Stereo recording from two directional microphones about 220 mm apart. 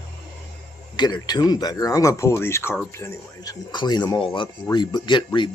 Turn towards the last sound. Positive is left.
turn(degrees=20)  # may be behind; listen again after turning